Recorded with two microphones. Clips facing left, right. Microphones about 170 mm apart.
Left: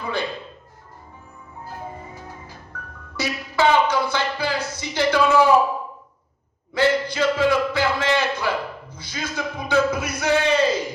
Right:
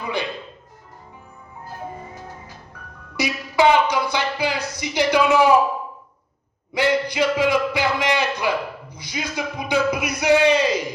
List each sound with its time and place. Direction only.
0.0 s speech: 15° right (ahead or behind)
2.7 s music: 15° right (ahead or behind)
3.2 s a sound: 15° right (ahead or behind)
6.7 s a man's voice: 15° right (ahead or behind)